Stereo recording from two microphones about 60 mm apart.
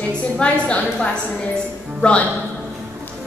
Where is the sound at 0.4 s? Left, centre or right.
Centre.